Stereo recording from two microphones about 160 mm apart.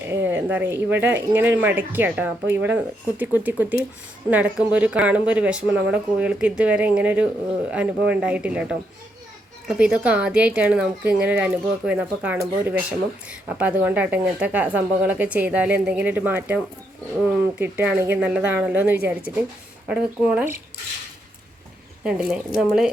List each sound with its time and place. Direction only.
0.0 s speech: 10° right (ahead or behind)
22.0 s a woman's voice: 5° right (ahead or behind)